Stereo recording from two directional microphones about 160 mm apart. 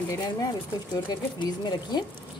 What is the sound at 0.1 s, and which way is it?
A woman's voice, 25° left (ahead or behind).